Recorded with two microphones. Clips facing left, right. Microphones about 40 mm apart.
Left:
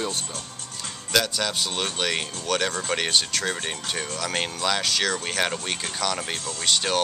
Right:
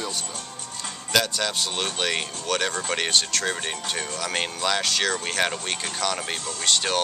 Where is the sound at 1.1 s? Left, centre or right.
Centre.